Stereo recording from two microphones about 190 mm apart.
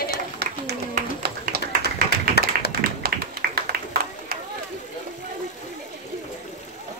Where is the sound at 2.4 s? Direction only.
60° left (ahead or behind).